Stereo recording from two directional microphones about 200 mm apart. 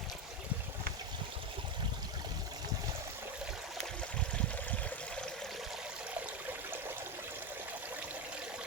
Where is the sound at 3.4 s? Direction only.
Centre (ahead or behind).